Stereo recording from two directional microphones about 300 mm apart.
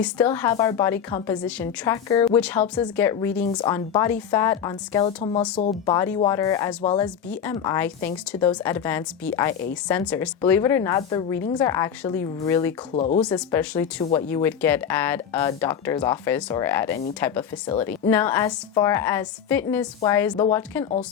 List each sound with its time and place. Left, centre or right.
0.0 s speech: centre
12.9 s speech: left
13.3 s speech: centre